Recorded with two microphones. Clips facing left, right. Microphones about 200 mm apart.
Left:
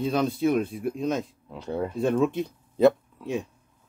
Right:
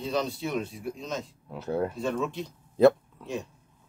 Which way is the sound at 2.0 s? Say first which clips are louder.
Left 7 dB; 55° left (ahead or behind).